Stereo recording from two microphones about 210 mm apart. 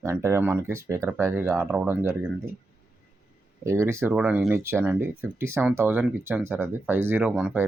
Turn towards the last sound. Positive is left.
turn(degrees=-5)  # may be behind; listen again after turning